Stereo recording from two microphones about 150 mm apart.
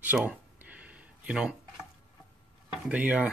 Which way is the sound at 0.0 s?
10° right (ahead or behind).